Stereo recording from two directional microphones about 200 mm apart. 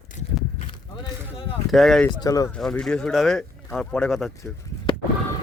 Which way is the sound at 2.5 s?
5° left (ahead or behind).